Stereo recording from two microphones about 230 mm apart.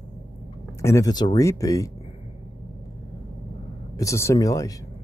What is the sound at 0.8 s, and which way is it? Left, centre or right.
Speech, centre.